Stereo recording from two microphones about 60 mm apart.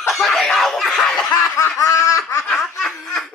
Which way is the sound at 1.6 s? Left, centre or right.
Left.